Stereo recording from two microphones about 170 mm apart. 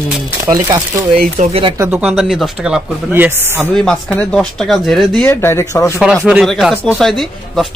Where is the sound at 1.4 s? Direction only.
35° right (ahead or behind).